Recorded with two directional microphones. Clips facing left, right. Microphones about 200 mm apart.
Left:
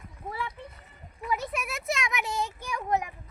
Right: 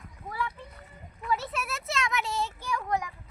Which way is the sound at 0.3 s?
25° left (ahead or behind).